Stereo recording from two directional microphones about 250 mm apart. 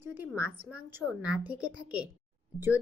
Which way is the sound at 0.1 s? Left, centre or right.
Centre.